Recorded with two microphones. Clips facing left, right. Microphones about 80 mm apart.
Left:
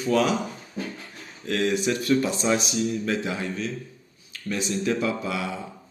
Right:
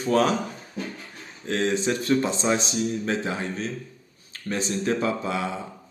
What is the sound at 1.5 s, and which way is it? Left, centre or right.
Speech, right.